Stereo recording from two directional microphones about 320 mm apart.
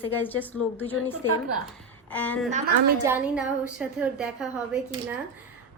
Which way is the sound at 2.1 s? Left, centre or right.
Centre.